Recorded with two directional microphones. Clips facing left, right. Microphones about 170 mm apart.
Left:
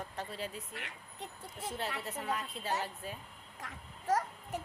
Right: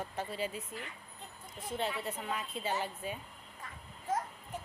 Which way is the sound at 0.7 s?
75° left (ahead or behind).